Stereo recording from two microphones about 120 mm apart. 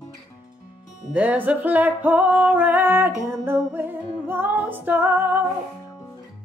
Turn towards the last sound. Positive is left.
turn(degrees=-15)  # may be behind; listen again after turning